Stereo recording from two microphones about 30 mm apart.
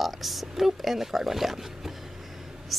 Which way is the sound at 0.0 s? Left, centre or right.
Centre.